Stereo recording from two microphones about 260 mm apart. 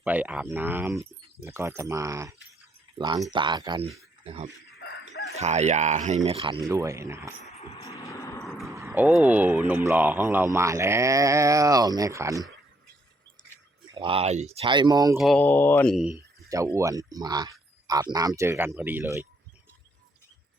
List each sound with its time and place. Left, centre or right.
0.0 s speech: centre
3.3 s speech: centre
5.4 s speech: right; by 7.3 s centre
7.4 s vehicle: left
7.8 s vehicle: centre
8.4 s a sound: centre
8.7 s speech: centre
13.8 s speech: centre
15.2 s mantra: centre
16.5 s speech: centre